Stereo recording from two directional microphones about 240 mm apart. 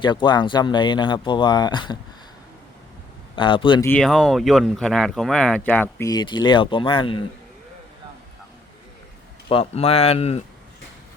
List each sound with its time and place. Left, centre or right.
0.0 s speech: centre
3.3 s speech: left
3.8 s speech: centre; by 7.2 s left
9.5 s speech: left